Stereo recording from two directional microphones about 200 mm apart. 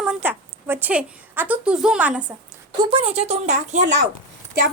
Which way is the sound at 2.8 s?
25° right (ahead or behind).